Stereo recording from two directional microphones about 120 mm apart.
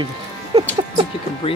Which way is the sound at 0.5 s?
55° right (ahead or behind).